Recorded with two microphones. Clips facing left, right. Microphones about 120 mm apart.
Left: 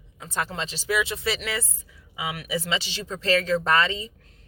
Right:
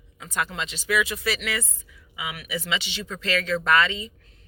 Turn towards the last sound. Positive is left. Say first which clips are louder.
# right 1 dB
turn(degrees=35)  # may be behind; listen again after turning